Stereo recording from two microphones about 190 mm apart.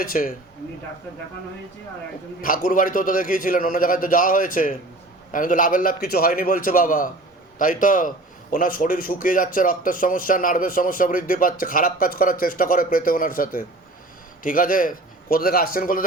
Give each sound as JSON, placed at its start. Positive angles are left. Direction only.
{"t": 0.0, "sound": "a man's voice", "side_deg": 45}
{"t": 2.4, "sound": "a man's voice", "side_deg": 45}